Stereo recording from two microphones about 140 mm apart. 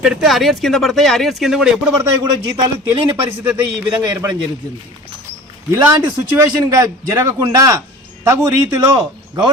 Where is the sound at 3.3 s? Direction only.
15° right (ahead or behind).